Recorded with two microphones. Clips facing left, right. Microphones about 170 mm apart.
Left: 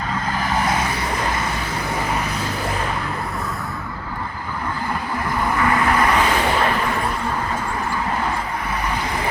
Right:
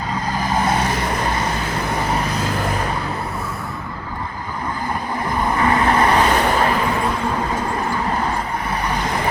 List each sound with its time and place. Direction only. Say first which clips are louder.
5.5 s vehicle: right 2 dB; 30° right (ahead or behind)